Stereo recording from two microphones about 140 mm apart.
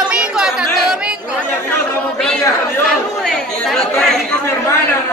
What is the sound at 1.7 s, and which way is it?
Chatter, 5° left (ahead or behind).